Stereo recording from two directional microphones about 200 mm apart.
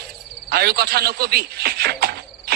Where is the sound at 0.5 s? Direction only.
50° right (ahead or behind).